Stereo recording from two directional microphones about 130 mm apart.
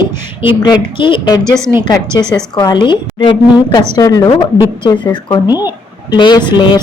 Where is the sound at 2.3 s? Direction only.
35° left (ahead or behind).